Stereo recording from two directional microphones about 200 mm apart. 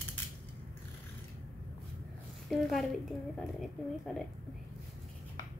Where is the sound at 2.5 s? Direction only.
Centre (ahead or behind).